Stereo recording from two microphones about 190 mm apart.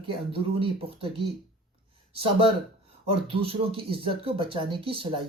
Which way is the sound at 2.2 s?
30° right (ahead or behind).